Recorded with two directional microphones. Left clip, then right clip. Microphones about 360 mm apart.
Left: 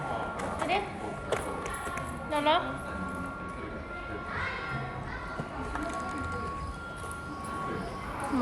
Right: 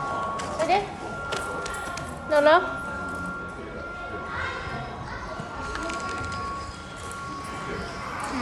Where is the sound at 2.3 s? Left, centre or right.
Centre.